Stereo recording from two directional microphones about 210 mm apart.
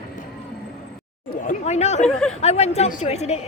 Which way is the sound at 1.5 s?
35° left (ahead or behind).